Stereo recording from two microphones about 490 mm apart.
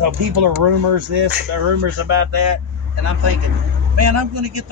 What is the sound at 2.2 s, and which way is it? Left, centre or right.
Speech, right.